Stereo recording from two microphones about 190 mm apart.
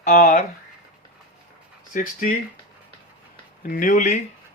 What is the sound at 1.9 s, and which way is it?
Speech, 45° left (ahead or behind).